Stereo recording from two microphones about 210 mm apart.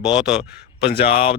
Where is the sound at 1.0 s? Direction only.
25° left (ahead or behind).